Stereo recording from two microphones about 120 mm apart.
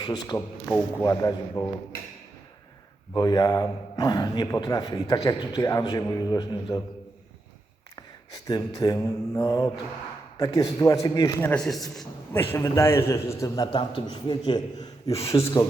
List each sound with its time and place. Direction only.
0.0 s a man's voice: 35° left (ahead or behind)
0.7 s a man's voice: 20° left (ahead or behind)
3.2 s a man's voice: 35° left (ahead or behind)
8.4 s a man's voice: 35° left (ahead or behind)
11.3 s a man's voice: 15° left (ahead or behind)
11.6 s a man's voice: centre (ahead or behind)
12.3 s a man's voice: 20° left (ahead or behind)
13.7 s a man's voice: 40° left (ahead or behind)
15.3 s a man's voice: 25° left (ahead or behind)